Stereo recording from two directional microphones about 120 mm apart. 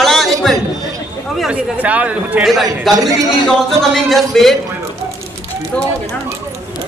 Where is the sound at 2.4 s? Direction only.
Centre (ahead or behind).